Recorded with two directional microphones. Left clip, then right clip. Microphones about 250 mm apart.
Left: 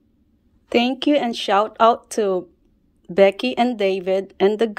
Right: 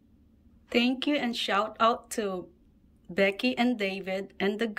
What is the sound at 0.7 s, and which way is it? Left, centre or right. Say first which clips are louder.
A woman's voice: left 9 dB; centre.